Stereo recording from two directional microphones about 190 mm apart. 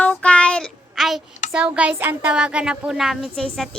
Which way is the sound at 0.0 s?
5° left (ahead or behind).